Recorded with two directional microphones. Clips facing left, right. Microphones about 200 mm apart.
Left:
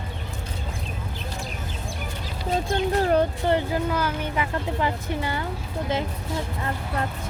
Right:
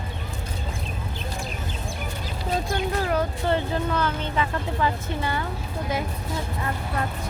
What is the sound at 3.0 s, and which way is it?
Speech, 35° left (ahead or behind).